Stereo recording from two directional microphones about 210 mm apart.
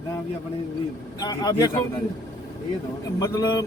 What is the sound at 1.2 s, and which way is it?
Speech, 15° left (ahead or behind).